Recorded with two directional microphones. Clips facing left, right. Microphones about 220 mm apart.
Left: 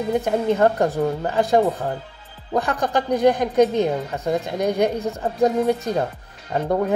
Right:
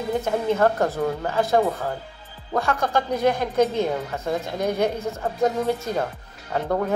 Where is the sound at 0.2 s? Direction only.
15° left (ahead or behind).